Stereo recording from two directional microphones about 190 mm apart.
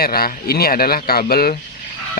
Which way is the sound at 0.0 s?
50° left (ahead or behind).